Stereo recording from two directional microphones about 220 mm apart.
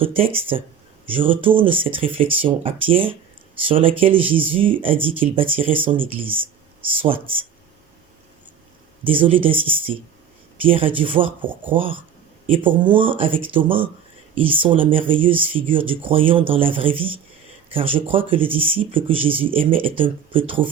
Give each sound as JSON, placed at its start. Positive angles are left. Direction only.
{"t": 0.0, "sound": "speech", "side_deg": -25}
{"t": 9.0, "sound": "speech", "side_deg": -25}